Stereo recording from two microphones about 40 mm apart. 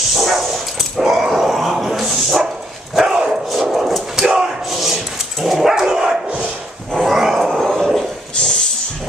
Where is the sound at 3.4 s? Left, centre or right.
Centre.